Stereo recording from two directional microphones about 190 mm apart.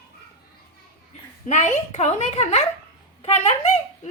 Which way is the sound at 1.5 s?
35° left (ahead or behind).